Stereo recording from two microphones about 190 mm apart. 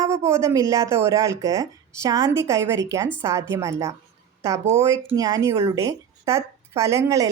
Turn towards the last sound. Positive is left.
turn(degrees=-15)  # may be behind; listen again after turning